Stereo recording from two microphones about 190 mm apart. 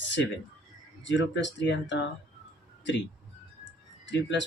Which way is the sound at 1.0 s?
70° left (ahead or behind).